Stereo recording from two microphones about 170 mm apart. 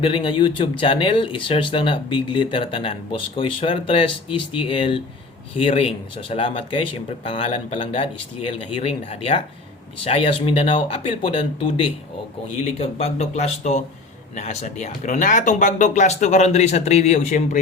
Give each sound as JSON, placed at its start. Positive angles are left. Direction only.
{"t": 0.0, "sound": "speech", "side_deg": 30}
{"t": 12.8, "sound": "speech", "side_deg": 35}